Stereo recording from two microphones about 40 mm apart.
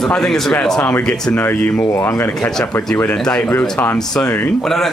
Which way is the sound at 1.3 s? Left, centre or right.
Left.